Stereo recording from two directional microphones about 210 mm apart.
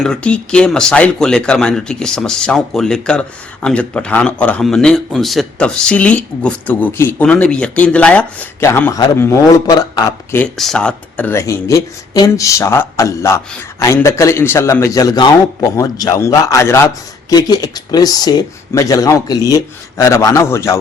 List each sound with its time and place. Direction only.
0.0 s speech: 5° left (ahead or behind)
10.4 s a man's voice: 5° left (ahead or behind)